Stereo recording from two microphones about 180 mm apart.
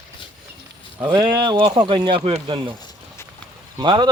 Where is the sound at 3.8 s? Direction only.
25° right (ahead or behind).